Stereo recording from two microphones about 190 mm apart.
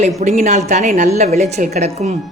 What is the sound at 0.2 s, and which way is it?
A woman's voice, 35° right (ahead or behind).